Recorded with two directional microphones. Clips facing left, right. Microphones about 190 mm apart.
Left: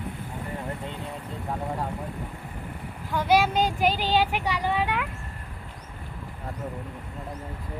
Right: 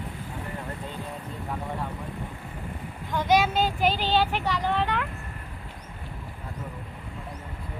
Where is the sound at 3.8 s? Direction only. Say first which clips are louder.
Left 1 dB; 45° left (ahead or behind).